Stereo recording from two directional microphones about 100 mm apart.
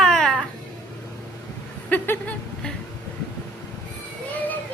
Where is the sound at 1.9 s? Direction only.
15° left (ahead or behind).